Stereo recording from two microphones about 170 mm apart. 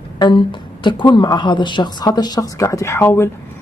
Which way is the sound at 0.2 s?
25° left (ahead or behind).